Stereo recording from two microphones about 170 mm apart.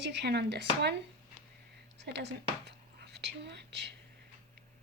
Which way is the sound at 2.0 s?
90° right.